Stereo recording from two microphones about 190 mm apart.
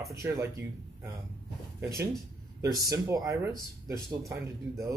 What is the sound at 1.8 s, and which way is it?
Speech, 15° right (ahead or behind).